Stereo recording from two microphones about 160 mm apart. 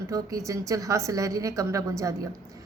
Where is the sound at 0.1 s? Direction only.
20° right (ahead or behind).